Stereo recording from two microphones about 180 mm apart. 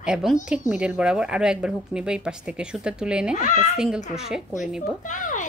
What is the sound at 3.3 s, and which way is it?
Speech, 45° left (ahead or behind).